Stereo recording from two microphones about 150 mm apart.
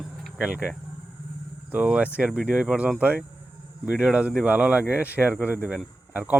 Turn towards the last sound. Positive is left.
turn(degrees=-10)  # may be behind; listen again after turning